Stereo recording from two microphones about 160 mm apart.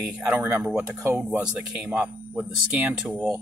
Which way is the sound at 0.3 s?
5° right (ahead or behind).